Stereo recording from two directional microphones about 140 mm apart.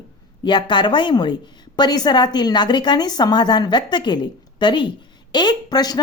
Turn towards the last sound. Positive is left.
turn(degrees=30)  # may be behind; listen again after turning